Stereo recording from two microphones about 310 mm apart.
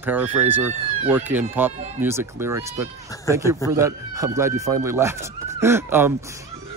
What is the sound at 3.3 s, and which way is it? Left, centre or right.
Speech, centre.